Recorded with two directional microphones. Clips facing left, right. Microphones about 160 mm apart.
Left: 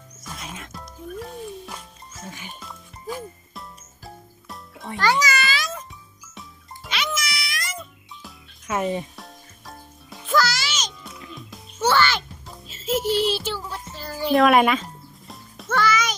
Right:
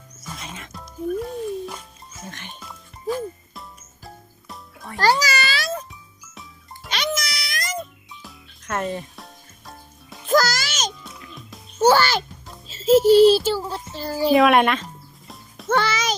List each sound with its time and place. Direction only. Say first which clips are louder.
0.2 s music: even; centre (ahead or behind)
4.9 s a child's voice: right 2 dB; 35° right (ahead or behind)
5.9 s music: even; centre (ahead or behind)
6.9 s music: right 2 dB; 35° right (ahead or behind)
8.2 s music: even; 5° left (ahead or behind)
9.1 s music: left 1 dB; centre (ahead or behind)
10.2 s music: right 3 dB; 45° right (ahead or behind)
11.0 s music: left 1 dB; centre (ahead or behind)
11.8 s a child's voice: right 4 dB; 40° right (ahead or behind)
14.3 s speech: even; centre (ahead or behind)
15.3 s music: right 5 dB; centre (ahead or behind)
15.7 s music: right 1 dB; 30° right (ahead or behind)